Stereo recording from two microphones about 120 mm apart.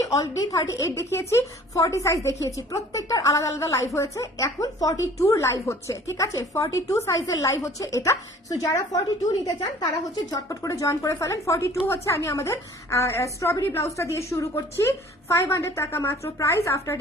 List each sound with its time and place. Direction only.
0.0 s a woman's voice: 25° left (ahead or behind)